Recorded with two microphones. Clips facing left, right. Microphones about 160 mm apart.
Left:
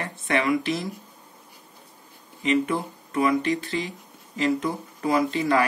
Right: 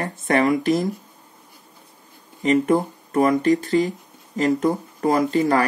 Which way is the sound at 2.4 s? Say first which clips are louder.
Right 6 dB; 45° right (ahead or behind).